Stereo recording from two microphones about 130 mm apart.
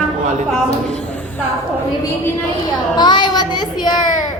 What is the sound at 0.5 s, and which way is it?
Speech, 5° left (ahead or behind).